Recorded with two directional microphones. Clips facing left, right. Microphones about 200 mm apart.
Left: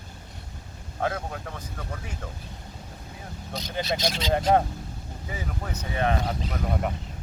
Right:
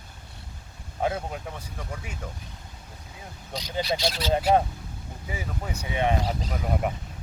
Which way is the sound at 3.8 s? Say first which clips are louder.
Right 1 dB; 20° left (ahead or behind).